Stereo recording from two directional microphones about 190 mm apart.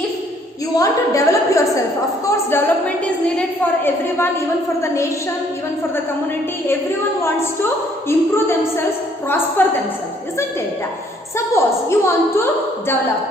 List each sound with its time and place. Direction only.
0.8 s a woman's voice: 15° left (ahead or behind)
7.2 s a woman's voice: 15° left (ahead or behind)
11.3 s a woman's voice: 15° left (ahead or behind)